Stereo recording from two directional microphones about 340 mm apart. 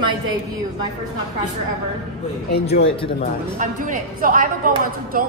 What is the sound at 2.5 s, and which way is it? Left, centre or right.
Speech, left.